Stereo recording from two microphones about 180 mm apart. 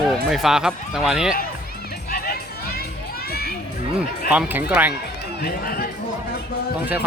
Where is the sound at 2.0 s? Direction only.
55° left (ahead or behind).